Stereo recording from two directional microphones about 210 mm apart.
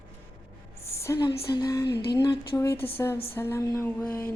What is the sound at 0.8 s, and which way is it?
A woman's voice, 15° left (ahead or behind).